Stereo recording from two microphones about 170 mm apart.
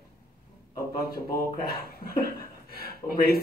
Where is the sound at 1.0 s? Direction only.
65° left (ahead or behind).